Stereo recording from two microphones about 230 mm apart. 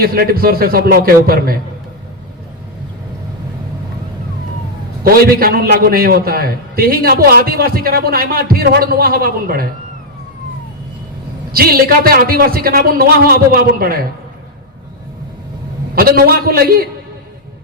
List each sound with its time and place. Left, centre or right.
0.0 s a man's voice: right
5.0 s a man's voice: right
11.5 s a man's voice: right
16.0 s a man's voice: right